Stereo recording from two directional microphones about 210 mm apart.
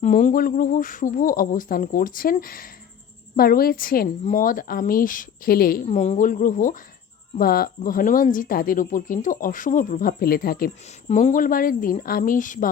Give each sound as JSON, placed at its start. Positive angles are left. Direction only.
{"t": 0.0, "sound": "a woman's voice", "side_deg": 35}